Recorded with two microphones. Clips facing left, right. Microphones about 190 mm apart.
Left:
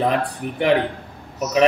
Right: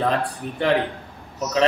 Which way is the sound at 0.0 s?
15° left (ahead or behind).